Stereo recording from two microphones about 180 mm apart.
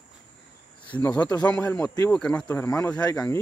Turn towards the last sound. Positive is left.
turn(degrees=15)  # may be behind; listen again after turning